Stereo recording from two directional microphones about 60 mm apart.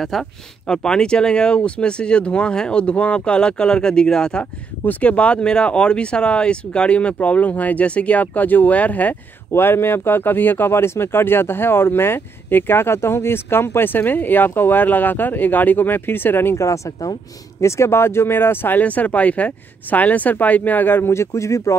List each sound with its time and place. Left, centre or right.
0.0 s speech: centre
4.8 s speech: left
9.5 s speech: left
16.5 s speech: left